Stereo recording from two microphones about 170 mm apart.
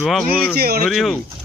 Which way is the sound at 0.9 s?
Centre (ahead or behind).